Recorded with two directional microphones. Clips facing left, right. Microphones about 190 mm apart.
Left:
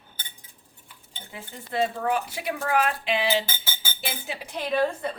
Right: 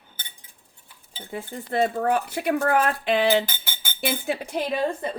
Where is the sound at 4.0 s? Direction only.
55° right (ahead or behind).